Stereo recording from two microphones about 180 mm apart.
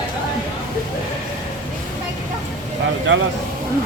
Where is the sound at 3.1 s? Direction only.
90° right.